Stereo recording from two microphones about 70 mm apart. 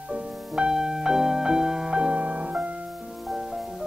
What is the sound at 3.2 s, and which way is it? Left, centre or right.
Music, centre.